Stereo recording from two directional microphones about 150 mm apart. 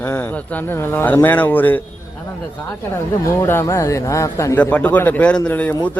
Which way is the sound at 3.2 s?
20° left (ahead or behind).